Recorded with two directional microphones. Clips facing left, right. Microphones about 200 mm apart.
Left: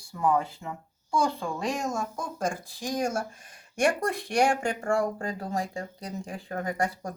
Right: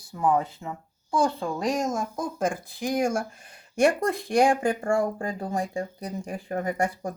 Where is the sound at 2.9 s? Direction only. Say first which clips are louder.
Right 3 dB; 10° right (ahead or behind).